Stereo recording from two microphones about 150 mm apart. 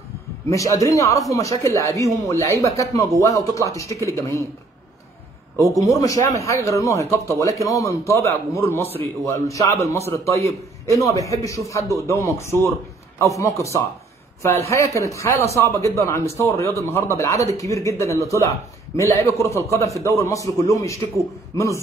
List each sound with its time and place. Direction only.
0.5 s a man's voice: 20° left (ahead or behind)
5.6 s a man's voice: 20° left (ahead or behind)